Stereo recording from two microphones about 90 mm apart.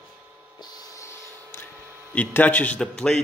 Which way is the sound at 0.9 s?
35° left (ahead or behind).